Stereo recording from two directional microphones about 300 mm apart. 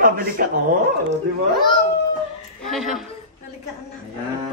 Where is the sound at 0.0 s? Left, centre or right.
Right.